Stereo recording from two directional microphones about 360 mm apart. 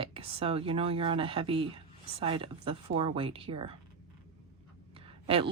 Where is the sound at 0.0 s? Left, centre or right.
Centre.